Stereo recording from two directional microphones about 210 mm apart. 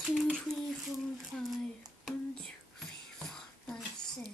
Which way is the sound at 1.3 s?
Centre (ahead or behind).